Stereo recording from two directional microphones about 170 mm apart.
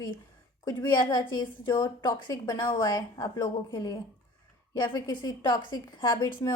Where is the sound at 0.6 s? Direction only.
25° left (ahead or behind).